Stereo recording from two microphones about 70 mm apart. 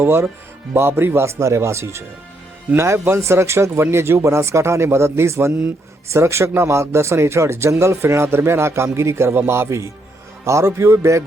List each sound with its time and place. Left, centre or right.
0.0 s a man's voice: right